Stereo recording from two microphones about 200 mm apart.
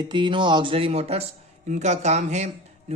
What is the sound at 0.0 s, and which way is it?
A man's voice, 25° right (ahead or behind).